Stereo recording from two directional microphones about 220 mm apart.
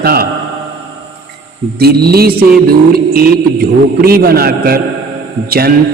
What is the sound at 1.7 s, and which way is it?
Speech, 45° right (ahead or behind).